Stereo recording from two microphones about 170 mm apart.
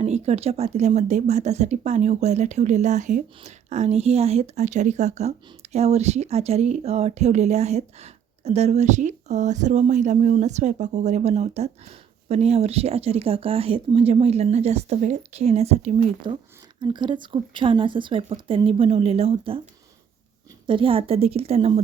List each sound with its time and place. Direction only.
0.0 s speech: 40° right (ahead or behind)
16.8 s speech: 25° right (ahead or behind)
20.7 s speech: 30° right (ahead or behind)